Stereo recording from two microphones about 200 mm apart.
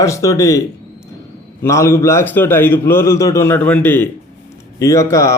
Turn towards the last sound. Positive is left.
turn(degrees=15)  # may be behind; listen again after turning